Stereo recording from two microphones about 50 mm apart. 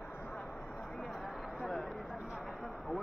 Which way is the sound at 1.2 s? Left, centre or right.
Centre.